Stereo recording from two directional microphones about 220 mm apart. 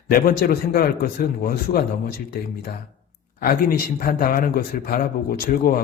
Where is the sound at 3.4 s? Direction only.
45° left (ahead or behind).